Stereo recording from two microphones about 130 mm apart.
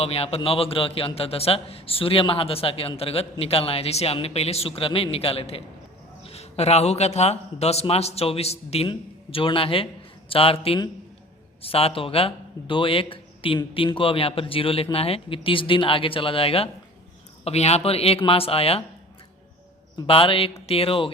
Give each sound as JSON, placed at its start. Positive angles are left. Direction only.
{"t": 0.0, "sound": "a man's voice", "side_deg": 50}
{"t": 8.9, "sound": "a man's voice", "side_deg": 40}
{"t": 20.1, "sound": "a man's voice", "side_deg": 45}